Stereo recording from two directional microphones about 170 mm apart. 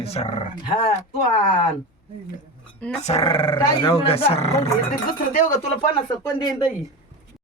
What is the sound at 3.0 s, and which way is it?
Speech, 35° left (ahead or behind).